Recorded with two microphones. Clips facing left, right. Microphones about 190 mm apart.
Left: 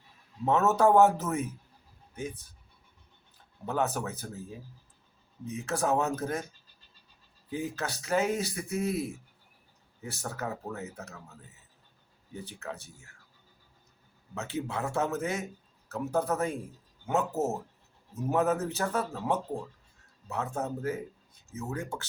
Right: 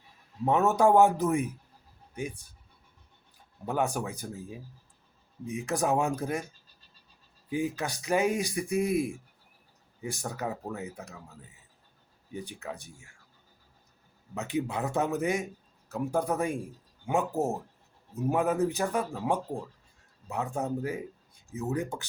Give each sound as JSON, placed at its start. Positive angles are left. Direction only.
{"t": 0.4, "sound": "a man's voice", "side_deg": -15}
{"t": 5.5, "sound": "a man's voice", "side_deg": -15}
{"t": 7.5, "sound": "a man's voice", "side_deg": -15}
{"t": 12.3, "sound": "a man's voice", "side_deg": -15}
{"t": 14.3, "sound": "a man's voice", "side_deg": -15}